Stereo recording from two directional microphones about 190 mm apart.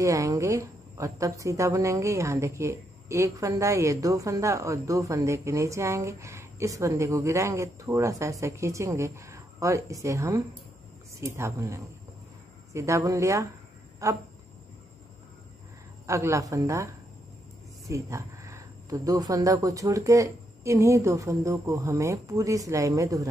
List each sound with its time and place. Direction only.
0.0 s speech: 15° right (ahead or behind)
16.1 s speech: 15° right (ahead or behind)